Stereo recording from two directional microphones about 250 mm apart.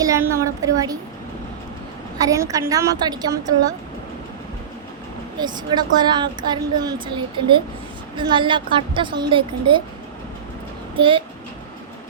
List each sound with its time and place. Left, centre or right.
0.0 s a woman's voice: centre
2.1 s a woman's voice: centre
5.4 s a woman's voice: centre
10.9 s a child's voice: right